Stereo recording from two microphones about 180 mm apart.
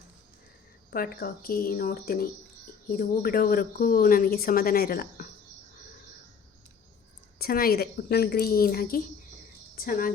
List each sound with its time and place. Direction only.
0.9 s speech: 55° left (ahead or behind)
7.3 s speech: 55° left (ahead or behind)